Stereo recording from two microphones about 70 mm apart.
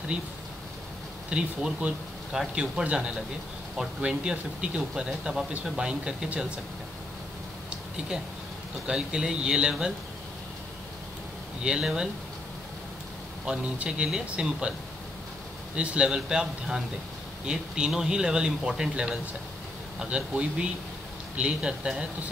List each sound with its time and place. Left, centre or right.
1.3 s speech: centre
8.8 s speech: centre
11.6 s speech: centre
13.5 s speech: centre
15.7 s speech: centre